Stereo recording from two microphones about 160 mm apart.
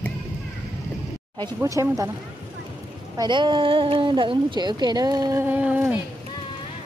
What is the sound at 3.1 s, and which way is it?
Speech, 25° right (ahead or behind).